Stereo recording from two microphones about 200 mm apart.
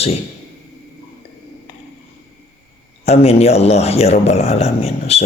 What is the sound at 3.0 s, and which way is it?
A man's voice, 30° left (ahead or behind).